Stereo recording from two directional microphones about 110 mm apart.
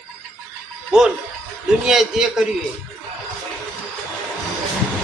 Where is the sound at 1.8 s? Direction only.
5° right (ahead or behind).